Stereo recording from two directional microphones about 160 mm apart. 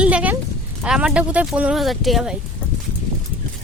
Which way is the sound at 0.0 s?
5° right (ahead or behind).